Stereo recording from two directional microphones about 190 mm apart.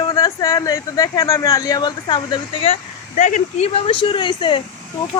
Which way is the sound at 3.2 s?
40° left (ahead or behind).